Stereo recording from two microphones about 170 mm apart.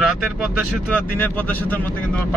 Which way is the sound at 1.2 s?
10° left (ahead or behind).